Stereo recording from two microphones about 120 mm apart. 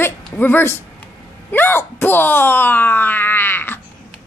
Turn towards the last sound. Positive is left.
turn(degrees=15)  # may be behind; listen again after turning